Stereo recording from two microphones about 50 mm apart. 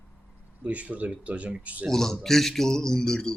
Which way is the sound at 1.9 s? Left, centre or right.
Centre.